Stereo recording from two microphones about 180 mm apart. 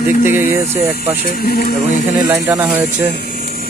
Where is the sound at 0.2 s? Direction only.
10° right (ahead or behind).